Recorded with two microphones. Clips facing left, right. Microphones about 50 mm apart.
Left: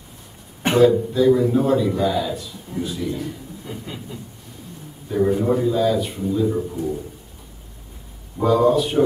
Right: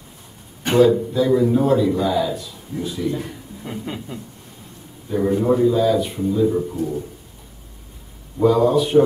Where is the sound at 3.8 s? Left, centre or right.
Right.